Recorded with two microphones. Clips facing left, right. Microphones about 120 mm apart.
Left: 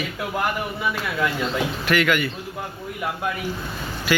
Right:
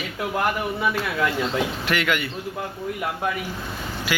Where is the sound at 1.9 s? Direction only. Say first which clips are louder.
Left 6 dB; 25° right (ahead or behind).